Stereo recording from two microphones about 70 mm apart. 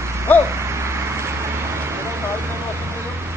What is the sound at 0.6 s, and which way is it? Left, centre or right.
Vehicle, right.